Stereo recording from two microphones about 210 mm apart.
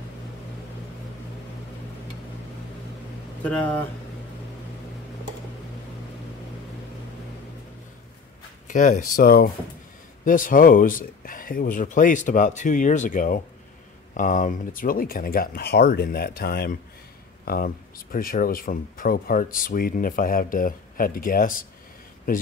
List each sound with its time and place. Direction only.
8.6 s speech: 35° left (ahead or behind)